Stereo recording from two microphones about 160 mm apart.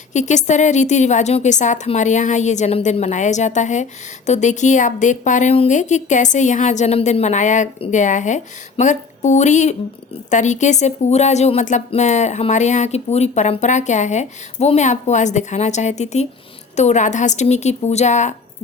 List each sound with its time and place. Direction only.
0.1 s speech: 50° left (ahead or behind)